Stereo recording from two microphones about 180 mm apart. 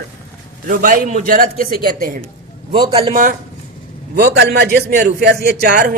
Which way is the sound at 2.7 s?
30° right (ahead or behind).